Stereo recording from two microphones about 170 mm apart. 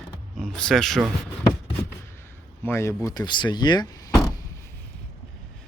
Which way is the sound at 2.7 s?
15° left (ahead or behind).